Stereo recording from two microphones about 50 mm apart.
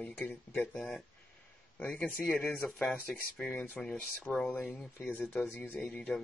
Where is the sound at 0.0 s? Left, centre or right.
Left.